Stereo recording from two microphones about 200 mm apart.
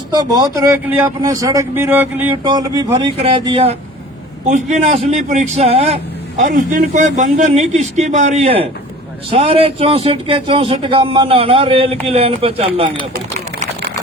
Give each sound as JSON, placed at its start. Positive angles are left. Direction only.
{"t": 0.1, "sound": "a man's voice", "side_deg": -20}